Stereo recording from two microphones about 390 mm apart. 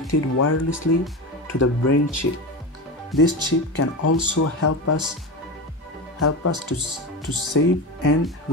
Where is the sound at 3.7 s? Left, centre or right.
Left.